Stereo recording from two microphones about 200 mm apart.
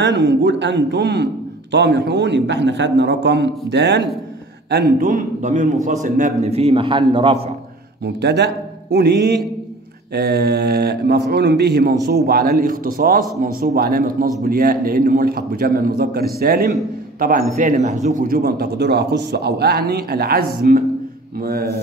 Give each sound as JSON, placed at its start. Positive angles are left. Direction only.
{"t": 0.0, "sound": "a man's voice", "side_deg": -60}
{"t": 5.0, "sound": "a man's voice", "side_deg": -40}
{"t": 8.0, "sound": "a man's voice", "side_deg": -55}